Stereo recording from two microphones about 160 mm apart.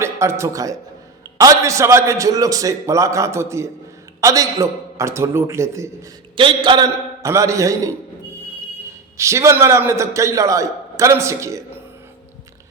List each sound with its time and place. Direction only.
0.0 s a man's voice: 15° right (ahead or behind)
6.3 s a man's voice: 30° right (ahead or behind)
9.1 s a man's voice: 20° right (ahead or behind)